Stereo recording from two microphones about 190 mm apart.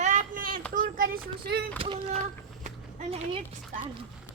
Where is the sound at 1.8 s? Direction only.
30° right (ahead or behind).